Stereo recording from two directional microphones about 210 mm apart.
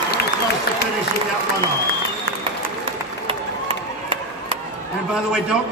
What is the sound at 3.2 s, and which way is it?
Run, 25° right (ahead or behind).